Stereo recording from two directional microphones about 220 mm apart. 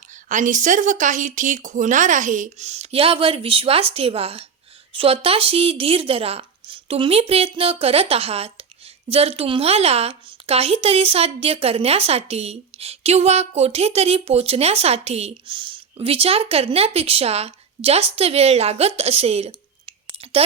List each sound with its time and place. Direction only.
0.3 s a woman's voice: 35° right (ahead or behind)